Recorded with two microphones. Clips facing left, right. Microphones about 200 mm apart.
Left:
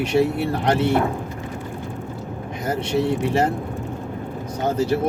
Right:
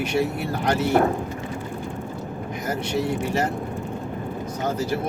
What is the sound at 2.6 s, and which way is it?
Speech, 30° left (ahead or behind).